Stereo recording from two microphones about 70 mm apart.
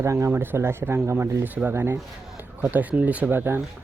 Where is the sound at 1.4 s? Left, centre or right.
Right.